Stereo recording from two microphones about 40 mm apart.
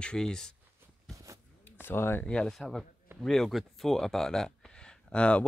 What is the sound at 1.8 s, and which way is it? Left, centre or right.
Speech, left.